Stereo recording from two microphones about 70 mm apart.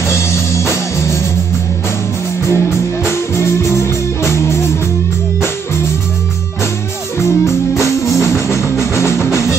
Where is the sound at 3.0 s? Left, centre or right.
Left.